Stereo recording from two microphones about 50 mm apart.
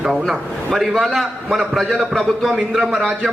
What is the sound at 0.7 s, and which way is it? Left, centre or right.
A man's voice, centre.